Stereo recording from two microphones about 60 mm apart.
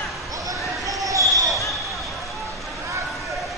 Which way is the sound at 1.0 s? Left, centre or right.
Right.